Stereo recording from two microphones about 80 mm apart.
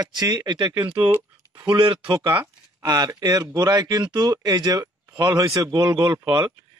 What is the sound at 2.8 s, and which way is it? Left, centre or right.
A man's voice, right.